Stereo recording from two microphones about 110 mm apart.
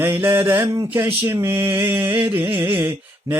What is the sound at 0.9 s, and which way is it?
Mantra, 20° right (ahead or behind).